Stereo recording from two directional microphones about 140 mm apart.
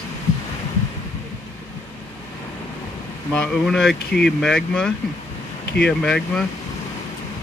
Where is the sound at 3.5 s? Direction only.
Centre (ahead or behind).